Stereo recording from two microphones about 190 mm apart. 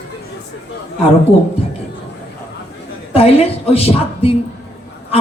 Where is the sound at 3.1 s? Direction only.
30° left (ahead or behind).